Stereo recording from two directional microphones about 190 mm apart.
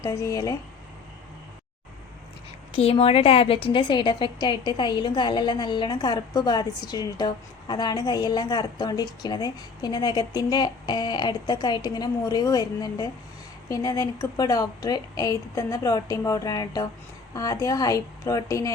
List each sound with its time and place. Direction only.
0.0 s a woman's voice: 15° left (ahead or behind)
2.7 s a woman's voice: 30° left (ahead or behind)